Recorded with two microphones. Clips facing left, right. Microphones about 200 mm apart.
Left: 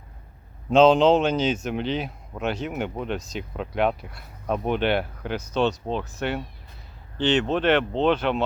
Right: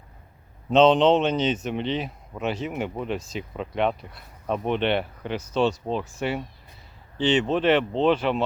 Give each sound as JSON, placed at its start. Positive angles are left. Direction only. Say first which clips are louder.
{"t": 0.7, "sound": "speech", "louder": "left 1 dB", "side_deg": 0}